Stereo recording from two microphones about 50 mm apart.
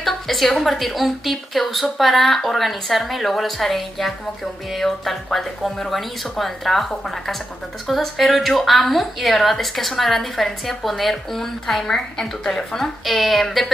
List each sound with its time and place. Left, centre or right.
0.0 s a woman's voice: centre
13.0 s a woman's voice: centre